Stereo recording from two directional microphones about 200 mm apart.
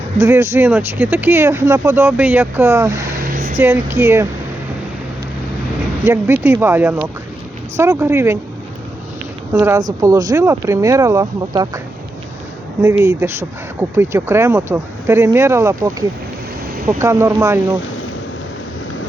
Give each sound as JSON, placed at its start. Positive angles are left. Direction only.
{"t": 0.2, "sound": "speech", "side_deg": -15}
{"t": 3.3, "sound": "speech", "side_deg": -35}
{"t": 3.6, "sound": "speech", "side_deg": -15}
{"t": 6.1, "sound": "speech", "side_deg": -10}
{"t": 9.5, "sound": "speech", "side_deg": -15}
{"t": 13.1, "sound": "speech", "side_deg": -15}